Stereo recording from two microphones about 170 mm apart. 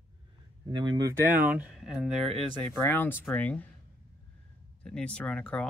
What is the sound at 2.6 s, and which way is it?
Speech, 10° left (ahead or behind).